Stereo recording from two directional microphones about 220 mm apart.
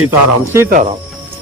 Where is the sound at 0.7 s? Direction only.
35° right (ahead or behind).